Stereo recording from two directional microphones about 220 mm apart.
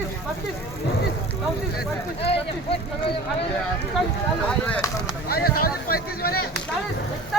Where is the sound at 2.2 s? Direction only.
25° left (ahead or behind).